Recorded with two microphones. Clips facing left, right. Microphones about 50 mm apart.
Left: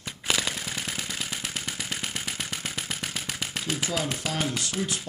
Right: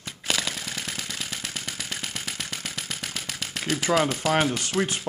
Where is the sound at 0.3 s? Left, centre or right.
Centre.